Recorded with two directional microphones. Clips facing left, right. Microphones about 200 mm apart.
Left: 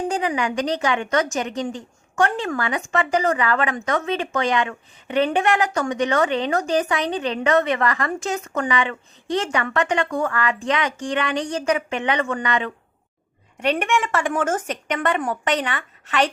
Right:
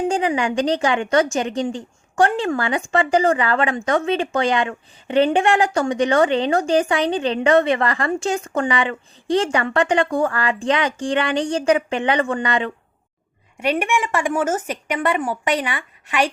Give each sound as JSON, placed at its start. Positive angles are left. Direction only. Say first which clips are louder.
{"t": 0.1, "sound": "a woman's voice", "louder": "right 3 dB", "side_deg": -30}
{"t": 13.6, "sound": "speech", "louder": "right 1 dB", "side_deg": -10}